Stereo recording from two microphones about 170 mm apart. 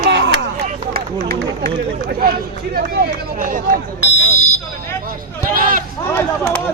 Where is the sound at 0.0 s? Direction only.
90° right.